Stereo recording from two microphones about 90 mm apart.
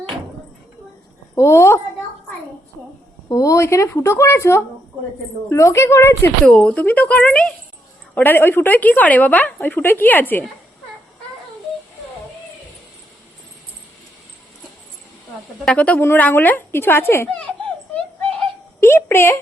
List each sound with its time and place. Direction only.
1.4 s speech: 30° left (ahead or behind)
3.2 s speech: 40° left (ahead or behind)
6.4 s a woman's voice: 15° left (ahead or behind)
15.6 s a woman's voice: 15° left (ahead or behind)
18.8 s a sound: 30° left (ahead or behind)